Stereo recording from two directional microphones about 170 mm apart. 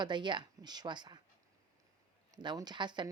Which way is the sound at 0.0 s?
25° right (ahead or behind).